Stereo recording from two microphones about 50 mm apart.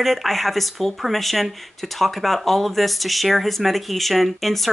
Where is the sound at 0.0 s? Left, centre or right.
Centre.